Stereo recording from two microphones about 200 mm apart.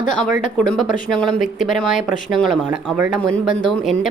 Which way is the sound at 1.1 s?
Centre (ahead or behind).